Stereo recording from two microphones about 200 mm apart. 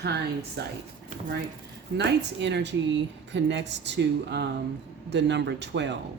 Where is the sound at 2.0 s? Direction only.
60° right (ahead or behind).